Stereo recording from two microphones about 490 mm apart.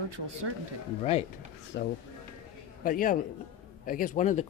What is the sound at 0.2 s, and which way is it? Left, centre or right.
Speech, right.